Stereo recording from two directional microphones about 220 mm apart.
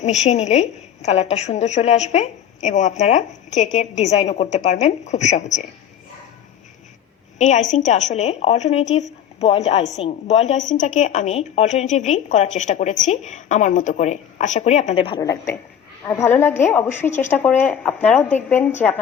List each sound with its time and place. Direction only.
0.0 s a woman's voice: 30° left (ahead or behind)
7.3 s a woman's voice: 30° left (ahead or behind); by 18.9 s 10° left (ahead or behind)